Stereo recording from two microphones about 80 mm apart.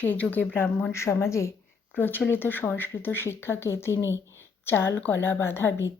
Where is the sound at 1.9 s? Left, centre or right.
Left.